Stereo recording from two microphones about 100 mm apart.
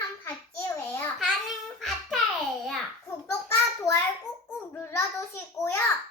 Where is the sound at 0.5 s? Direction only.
25° left (ahead or behind).